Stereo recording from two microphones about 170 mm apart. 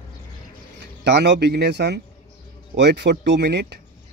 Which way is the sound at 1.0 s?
80° right.